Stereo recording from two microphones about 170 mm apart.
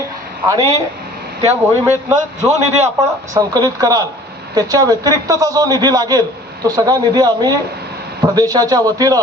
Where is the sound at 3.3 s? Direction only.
20° right (ahead or behind).